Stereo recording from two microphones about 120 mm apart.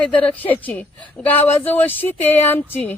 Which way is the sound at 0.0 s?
10° left (ahead or behind).